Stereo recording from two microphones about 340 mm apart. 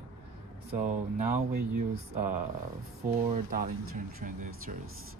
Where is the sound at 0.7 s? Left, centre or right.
Right.